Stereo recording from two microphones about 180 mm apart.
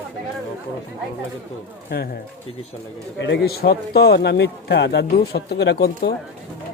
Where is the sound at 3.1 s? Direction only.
75° left (ahead or behind).